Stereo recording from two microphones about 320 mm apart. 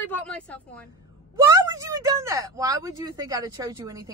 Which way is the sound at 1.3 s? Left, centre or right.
Centre.